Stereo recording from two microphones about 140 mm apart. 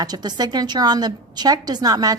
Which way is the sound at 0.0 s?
30° right (ahead or behind).